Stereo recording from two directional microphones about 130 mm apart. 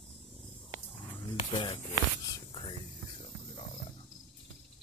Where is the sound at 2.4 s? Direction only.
40° left (ahead or behind).